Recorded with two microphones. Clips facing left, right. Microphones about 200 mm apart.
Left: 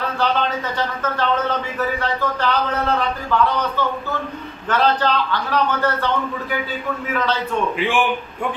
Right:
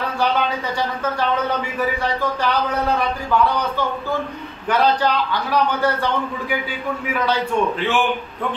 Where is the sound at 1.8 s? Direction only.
10° right (ahead or behind).